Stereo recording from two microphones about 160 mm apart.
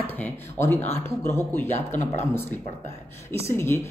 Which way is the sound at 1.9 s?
50° left (ahead or behind).